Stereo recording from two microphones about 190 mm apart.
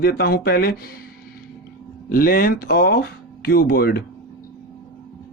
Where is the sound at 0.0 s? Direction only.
55° left (ahead or behind).